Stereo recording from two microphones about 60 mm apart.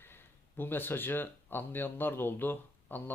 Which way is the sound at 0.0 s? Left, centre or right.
Left.